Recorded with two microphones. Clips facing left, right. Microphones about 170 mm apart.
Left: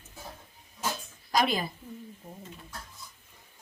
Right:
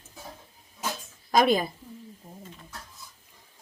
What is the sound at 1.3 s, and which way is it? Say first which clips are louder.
Speech: right 6 dB; 50° right (ahead or behind).